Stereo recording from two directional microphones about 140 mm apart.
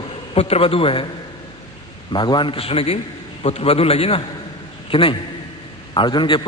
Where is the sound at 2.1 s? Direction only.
35° left (ahead or behind).